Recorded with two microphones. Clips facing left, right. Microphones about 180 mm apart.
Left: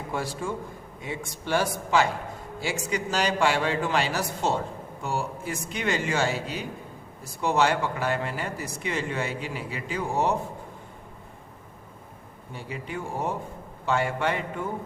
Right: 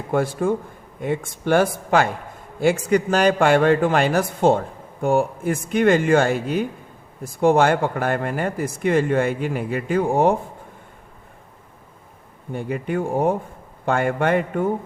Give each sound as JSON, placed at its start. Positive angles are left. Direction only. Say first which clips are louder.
{"t": 0.1, "sound": "a man's voice", "louder": "right 11 dB", "side_deg": -55}
{"t": 12.5, "sound": "a man's voice", "louder": "right 11 dB", "side_deg": -55}